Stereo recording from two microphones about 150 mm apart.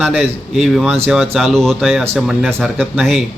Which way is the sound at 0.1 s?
Centre (ahead or behind).